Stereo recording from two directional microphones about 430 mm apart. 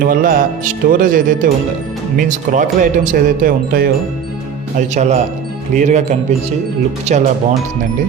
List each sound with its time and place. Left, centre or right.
0.0 s speech: centre